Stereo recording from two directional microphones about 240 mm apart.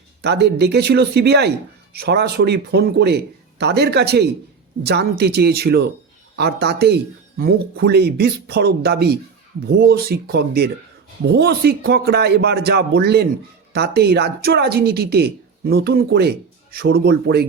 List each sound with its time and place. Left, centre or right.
0.2 s speech: right